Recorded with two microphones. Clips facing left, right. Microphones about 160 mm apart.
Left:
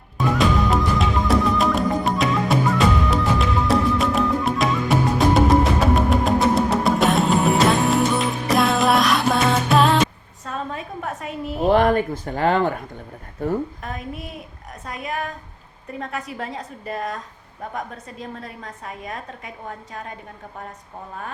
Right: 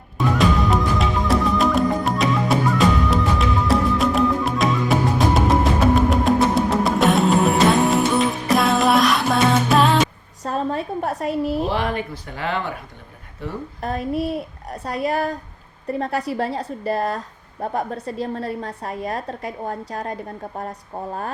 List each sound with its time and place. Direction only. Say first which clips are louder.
0.2 s music: right 1 dB; centre (ahead or behind)
10.4 s a sound: right 6 dB; 35° right (ahead or behind)
11.7 s speech: left 7 dB; 45° left (ahead or behind)
13.8 s a woman's voice: right 9 dB; 35° right (ahead or behind)